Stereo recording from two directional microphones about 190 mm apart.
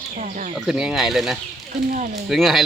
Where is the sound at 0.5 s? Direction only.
5° right (ahead or behind).